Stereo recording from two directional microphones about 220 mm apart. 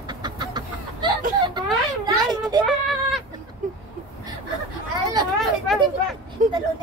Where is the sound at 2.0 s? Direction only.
20° right (ahead or behind).